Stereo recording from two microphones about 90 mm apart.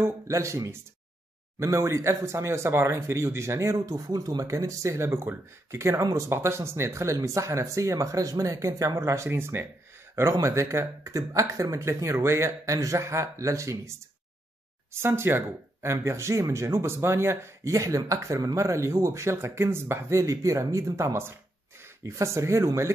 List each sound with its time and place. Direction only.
0.0 s speech: 30° right (ahead or behind)